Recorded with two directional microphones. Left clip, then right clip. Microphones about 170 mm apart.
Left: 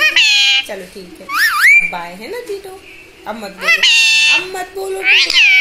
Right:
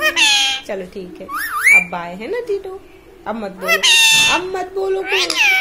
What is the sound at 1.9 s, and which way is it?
Speech, 15° right (ahead or behind).